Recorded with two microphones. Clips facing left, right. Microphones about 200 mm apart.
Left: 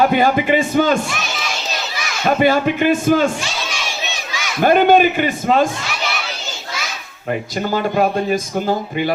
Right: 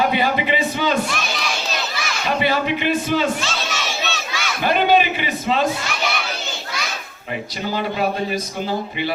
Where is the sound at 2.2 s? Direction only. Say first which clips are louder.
Left 6 dB; 45° left (ahead or behind).